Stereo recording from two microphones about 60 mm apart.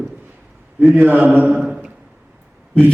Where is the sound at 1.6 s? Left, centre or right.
Centre.